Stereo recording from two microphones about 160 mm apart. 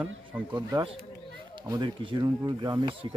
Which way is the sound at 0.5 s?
25° right (ahead or behind).